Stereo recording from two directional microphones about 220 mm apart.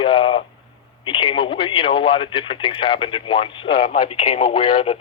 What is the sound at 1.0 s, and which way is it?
Speech, 25° left (ahead or behind).